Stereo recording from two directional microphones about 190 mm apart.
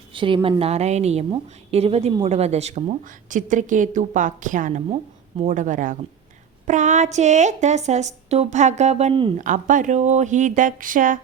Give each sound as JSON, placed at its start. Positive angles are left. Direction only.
{"t": 0.1, "sound": "a woman's voice", "side_deg": -25}
{"t": 9.4, "sound": "speech", "side_deg": -40}